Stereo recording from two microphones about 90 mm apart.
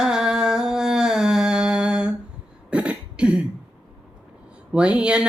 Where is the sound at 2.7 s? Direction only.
15° right (ahead or behind).